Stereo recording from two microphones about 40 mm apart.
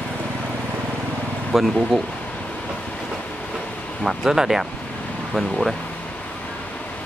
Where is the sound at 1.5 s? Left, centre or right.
Centre.